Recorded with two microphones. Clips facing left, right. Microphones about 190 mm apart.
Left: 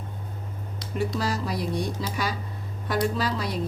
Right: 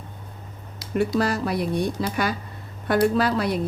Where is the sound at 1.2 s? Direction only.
60° right (ahead or behind).